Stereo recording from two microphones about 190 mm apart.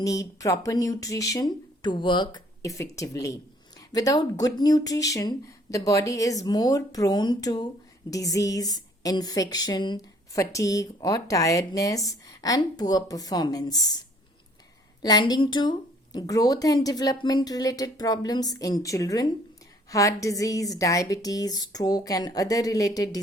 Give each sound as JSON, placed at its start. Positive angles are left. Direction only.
{"t": 0.0, "sound": "speech", "side_deg": 20}
{"t": 15.0, "sound": "speech", "side_deg": 20}